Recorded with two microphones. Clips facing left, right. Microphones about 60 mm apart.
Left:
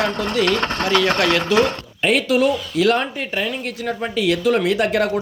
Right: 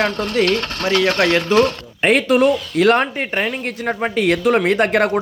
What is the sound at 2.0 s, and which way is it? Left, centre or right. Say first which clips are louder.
A man's voice: right 3 dB; right.